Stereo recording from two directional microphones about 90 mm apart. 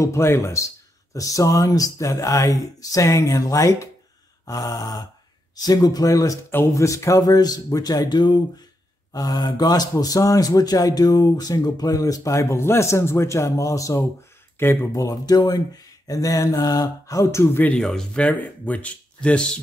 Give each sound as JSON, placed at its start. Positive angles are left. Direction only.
{"t": 0.0, "sound": "speech", "side_deg": 30}
{"t": 14.6, "sound": "speech", "side_deg": 25}
{"t": 15.0, "sound": "speech", "side_deg": 45}
{"t": 17.6, "sound": "speech", "side_deg": 5}